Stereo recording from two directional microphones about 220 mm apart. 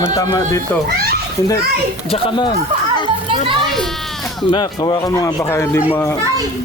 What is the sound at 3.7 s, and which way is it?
Sheep, centre (ahead or behind).